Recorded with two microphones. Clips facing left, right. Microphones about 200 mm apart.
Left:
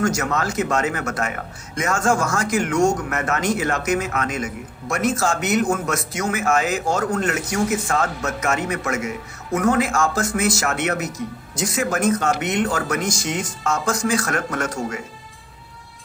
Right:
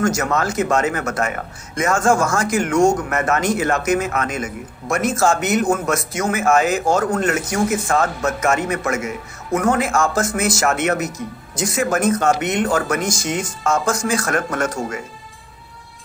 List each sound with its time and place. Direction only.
0.0 s speech: 50° right (ahead or behind)